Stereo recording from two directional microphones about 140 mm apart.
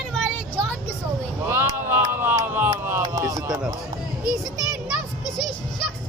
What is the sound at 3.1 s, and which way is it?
Music, 25° right (ahead or behind).